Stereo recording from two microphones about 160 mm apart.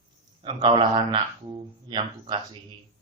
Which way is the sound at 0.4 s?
30° right (ahead or behind).